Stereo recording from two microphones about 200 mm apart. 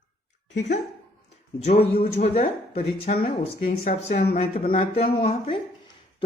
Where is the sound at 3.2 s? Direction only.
50° left (ahead or behind).